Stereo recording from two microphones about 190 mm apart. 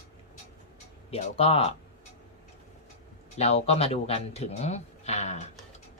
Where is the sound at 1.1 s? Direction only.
30° left (ahead or behind).